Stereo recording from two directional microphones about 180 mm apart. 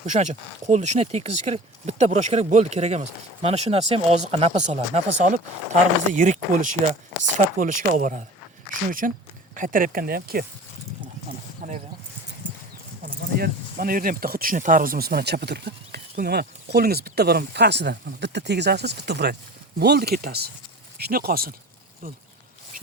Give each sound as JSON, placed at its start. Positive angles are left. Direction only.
{"t": 0.0, "sound": "speech", "side_deg": -40}
{"t": 11.6, "sound": "speech", "side_deg": -45}
{"t": 13.4, "sound": "speech", "side_deg": -55}